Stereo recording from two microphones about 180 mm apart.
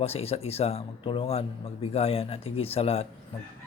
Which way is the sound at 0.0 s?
35° left (ahead or behind).